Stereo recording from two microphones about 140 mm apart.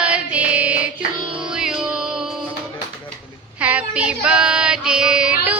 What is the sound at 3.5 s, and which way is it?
Child singing, 10° right (ahead or behind).